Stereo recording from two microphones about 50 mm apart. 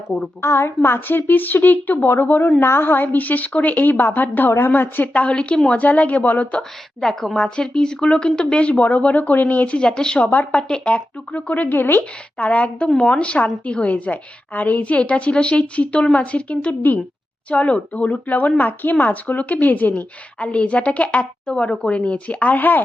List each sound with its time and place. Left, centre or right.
0.4 s a woman's voice: left
6.6 s a woman's voice: centre; by 9.7 s left
9.7 s a woman's voice: centre
10.2 s speech: left
10.5 s a woman's voice: left
12.4 s a woman's voice: left
20.0 s a woman's voice: left
21.4 s a woman's voice: centre; by 22.8 s left